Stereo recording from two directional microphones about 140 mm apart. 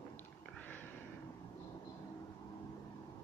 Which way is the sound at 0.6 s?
10° left (ahead or behind).